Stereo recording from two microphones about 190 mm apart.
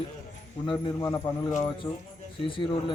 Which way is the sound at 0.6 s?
20° left (ahead or behind).